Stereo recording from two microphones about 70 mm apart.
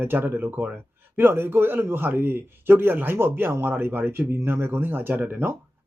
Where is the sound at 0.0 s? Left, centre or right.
Right.